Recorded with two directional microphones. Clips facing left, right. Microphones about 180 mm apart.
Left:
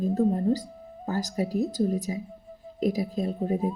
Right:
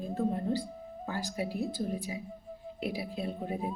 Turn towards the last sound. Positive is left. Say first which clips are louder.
# left 8 dB
turn(degrees=40)  # may be behind; listen again after turning